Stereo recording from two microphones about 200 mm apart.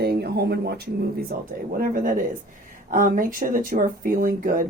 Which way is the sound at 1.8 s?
40° right (ahead or behind).